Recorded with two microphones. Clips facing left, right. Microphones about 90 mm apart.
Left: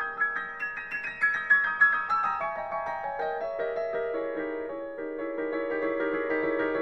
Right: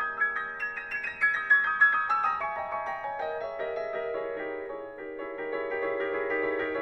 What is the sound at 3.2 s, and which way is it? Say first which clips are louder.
Music: left 4 dB; 35° left (ahead or behind).